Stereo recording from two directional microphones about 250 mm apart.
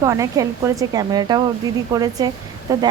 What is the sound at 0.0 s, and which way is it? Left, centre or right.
Speech, centre.